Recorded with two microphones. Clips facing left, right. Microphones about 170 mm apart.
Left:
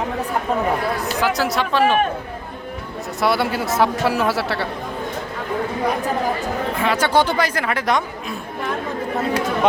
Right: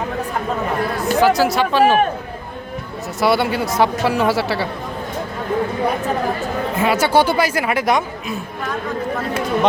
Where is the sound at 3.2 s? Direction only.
Centre (ahead or behind).